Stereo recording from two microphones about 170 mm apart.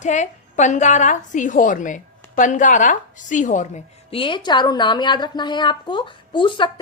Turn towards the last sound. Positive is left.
turn(degrees=30)  # may be behind; listen again after turning